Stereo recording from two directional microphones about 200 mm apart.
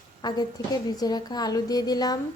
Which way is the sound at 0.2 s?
20° left (ahead or behind).